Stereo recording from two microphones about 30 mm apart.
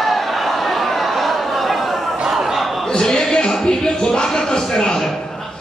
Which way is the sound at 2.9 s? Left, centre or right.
Left.